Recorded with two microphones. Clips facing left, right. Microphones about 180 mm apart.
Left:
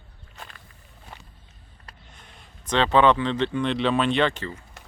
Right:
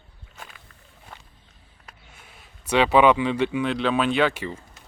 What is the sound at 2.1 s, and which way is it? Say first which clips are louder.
Speech: left 1 dB; 5° right (ahead or behind).